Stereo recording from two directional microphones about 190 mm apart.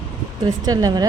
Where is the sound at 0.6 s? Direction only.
20° right (ahead or behind).